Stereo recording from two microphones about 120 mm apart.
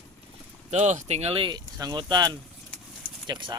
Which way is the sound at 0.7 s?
80° right.